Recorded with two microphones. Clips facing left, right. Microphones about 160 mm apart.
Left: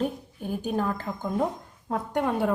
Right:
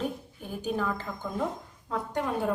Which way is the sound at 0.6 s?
45° left (ahead or behind).